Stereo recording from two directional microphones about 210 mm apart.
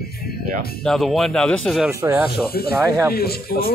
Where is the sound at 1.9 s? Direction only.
10° right (ahead or behind).